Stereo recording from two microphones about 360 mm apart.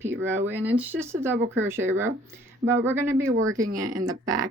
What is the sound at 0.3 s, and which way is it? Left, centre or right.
Speech, centre.